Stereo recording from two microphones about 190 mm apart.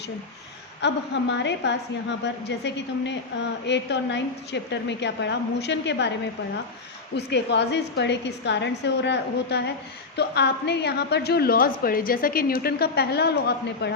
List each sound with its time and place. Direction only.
0.8 s a woman's voice: 65° left (ahead or behind)
7.2 s a woman's voice: 65° left (ahead or behind)